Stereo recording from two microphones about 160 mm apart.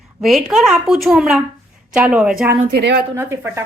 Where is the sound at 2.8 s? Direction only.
90° right.